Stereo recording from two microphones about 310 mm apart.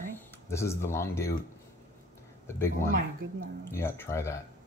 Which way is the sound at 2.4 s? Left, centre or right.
Centre.